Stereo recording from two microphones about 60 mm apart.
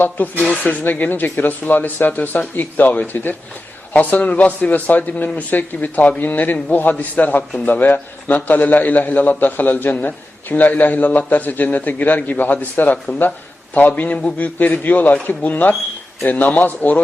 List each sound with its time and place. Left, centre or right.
0.2 s a man's voice: left